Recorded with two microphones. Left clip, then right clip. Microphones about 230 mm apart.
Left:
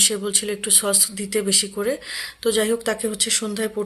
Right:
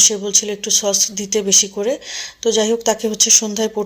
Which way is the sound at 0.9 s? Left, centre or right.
Left.